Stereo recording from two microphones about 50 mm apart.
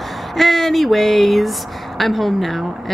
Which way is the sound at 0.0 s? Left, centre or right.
Centre.